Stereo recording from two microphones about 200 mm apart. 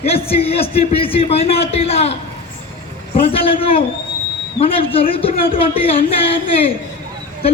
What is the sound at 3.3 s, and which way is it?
Speech, 30° left (ahead or behind).